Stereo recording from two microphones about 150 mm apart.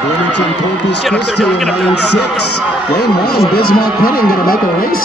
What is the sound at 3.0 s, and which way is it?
Speech, 90° left.